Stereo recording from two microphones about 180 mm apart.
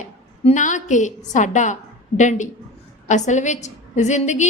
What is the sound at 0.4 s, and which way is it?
A woman's voice, 45° left (ahead or behind).